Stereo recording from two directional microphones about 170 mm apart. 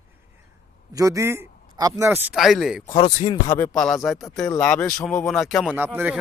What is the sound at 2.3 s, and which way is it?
Speech, centre (ahead or behind).